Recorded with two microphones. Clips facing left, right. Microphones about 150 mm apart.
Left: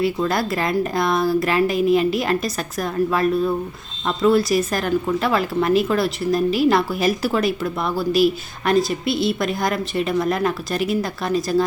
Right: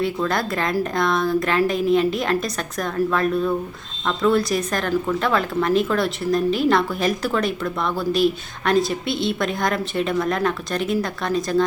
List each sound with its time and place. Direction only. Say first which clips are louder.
0.0 s speech: left 2 dB; 5° left (ahead or behind)